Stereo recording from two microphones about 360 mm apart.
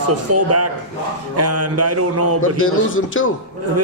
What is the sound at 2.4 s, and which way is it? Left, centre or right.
Speech, left.